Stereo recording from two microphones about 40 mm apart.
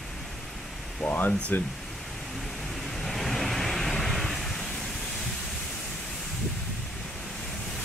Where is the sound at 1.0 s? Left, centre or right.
Left.